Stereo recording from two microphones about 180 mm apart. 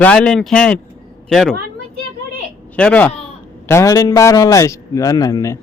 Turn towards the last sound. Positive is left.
turn(degrees=20)  # may be behind; listen again after turning